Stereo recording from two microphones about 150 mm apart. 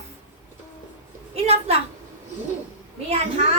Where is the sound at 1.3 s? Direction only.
40° right (ahead or behind).